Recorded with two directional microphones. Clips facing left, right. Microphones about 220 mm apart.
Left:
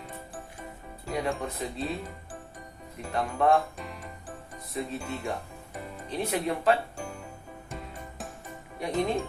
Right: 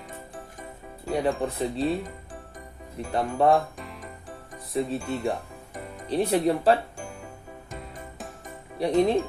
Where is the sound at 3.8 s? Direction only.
Centre (ahead or behind).